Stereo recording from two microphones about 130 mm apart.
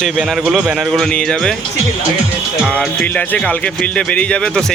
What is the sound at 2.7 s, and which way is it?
A man's voice, 10° left (ahead or behind).